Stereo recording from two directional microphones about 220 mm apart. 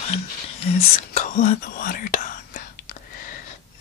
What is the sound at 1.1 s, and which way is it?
Whispering, 35° left (ahead or behind).